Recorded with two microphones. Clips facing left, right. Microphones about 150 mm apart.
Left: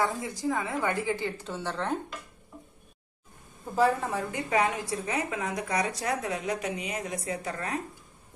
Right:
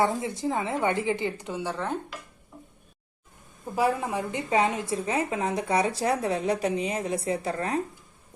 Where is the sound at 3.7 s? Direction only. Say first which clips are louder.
Even; 10° right (ahead or behind); by 7.7 s 30° right (ahead or behind).